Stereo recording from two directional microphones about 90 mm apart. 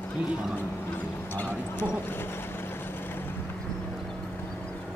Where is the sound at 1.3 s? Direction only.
25° left (ahead or behind).